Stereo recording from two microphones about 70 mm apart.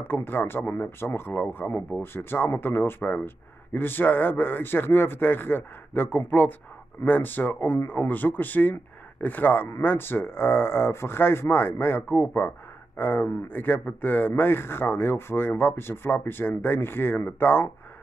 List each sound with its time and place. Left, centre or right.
0.0 s a man's voice: left